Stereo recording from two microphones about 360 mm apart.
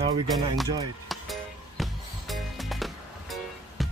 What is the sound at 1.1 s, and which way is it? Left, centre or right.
Music, centre.